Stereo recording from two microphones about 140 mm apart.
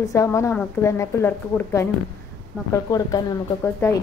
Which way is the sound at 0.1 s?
20° left (ahead or behind).